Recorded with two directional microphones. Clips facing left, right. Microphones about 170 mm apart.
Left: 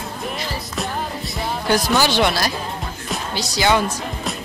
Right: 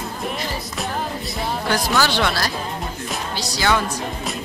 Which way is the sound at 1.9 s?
15° left (ahead or behind).